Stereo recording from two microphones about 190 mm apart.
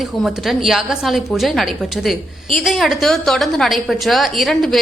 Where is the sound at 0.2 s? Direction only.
Centre (ahead or behind).